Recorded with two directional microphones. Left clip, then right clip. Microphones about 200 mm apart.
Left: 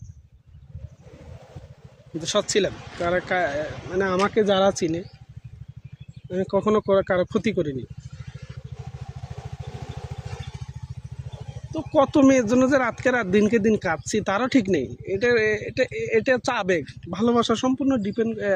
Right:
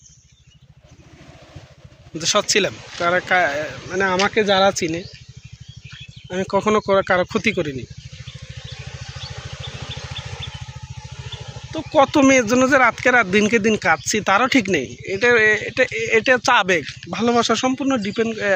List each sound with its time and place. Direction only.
2.1 s speech: 5° left (ahead or behind)
6.3 s speech: centre (ahead or behind)
11.9 s speech: 5° left (ahead or behind)